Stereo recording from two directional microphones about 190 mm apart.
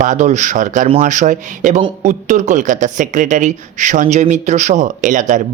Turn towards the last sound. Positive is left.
turn(degrees=-40)  # may be behind; listen again after turning